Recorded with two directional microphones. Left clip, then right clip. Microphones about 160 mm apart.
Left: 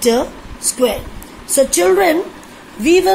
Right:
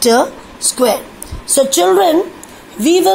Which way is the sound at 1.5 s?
40° right (ahead or behind).